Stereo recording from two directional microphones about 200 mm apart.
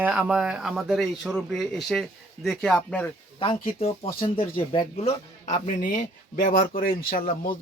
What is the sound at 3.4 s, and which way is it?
A man's voice, 25° left (ahead or behind).